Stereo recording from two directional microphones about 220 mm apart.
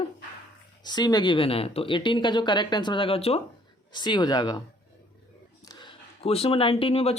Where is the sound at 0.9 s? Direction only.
20° left (ahead or behind).